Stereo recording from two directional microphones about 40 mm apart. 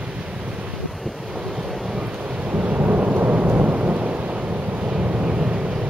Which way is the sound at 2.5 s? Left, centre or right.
Right.